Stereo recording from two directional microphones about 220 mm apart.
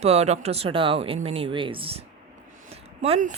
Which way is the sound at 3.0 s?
30° right (ahead or behind).